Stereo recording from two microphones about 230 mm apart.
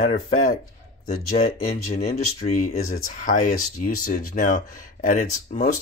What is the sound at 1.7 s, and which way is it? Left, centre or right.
Speech, left.